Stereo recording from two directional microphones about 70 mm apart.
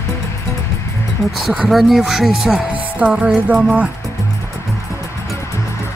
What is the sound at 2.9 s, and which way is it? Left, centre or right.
Music, centre.